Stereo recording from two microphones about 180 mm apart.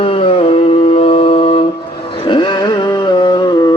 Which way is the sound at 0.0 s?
30° left (ahead or behind).